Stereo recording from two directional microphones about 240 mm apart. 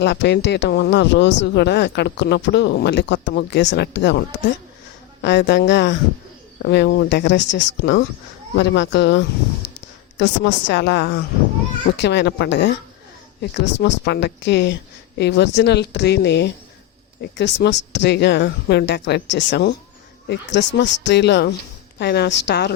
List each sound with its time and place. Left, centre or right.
0.0 s speech: left
5.2 s speech: left
9.6 s a sound: left
10.2 s speech: left